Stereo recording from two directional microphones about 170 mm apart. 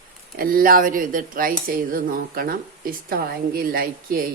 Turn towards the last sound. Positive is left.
turn(degrees=-60)  # may be behind; listen again after turning